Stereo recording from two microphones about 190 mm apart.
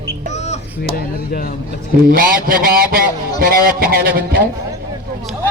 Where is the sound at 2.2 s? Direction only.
50° right (ahead or behind).